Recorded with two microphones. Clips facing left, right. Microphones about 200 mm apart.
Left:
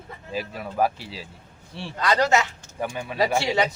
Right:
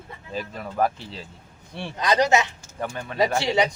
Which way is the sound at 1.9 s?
20° right (ahead or behind).